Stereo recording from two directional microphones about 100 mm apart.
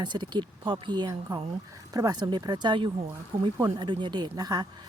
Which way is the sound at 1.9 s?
40° right (ahead or behind).